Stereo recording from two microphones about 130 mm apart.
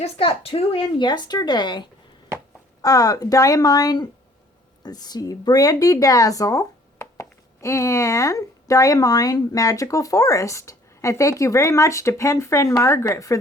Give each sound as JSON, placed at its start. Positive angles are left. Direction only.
{"t": 0.0, "sound": "speech", "side_deg": 45}